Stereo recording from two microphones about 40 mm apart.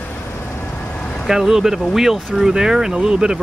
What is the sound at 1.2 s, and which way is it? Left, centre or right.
Speech, centre.